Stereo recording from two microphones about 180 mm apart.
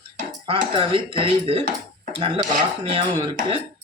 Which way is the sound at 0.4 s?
30° right (ahead or behind).